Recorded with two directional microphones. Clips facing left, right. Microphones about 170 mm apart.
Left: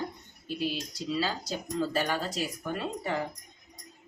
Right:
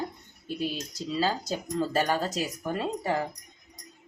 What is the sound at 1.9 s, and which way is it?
Speech, 45° right (ahead or behind).